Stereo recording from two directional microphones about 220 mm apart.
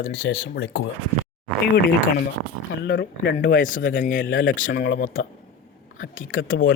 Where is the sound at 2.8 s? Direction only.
50° left (ahead or behind).